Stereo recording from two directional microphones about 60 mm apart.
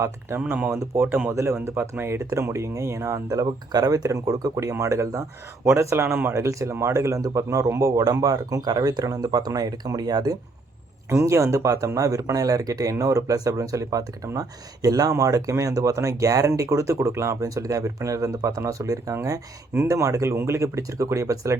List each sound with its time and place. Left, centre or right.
0.3 s speech: right
1.0 s speech: right
1.3 s speech: right
1.6 s speech: right
4.5 s speech: right
7.2 s speech: right
11.1 s speech: right
19.1 s speech: right